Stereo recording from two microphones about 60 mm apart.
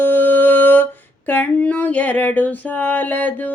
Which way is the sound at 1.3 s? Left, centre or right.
Left.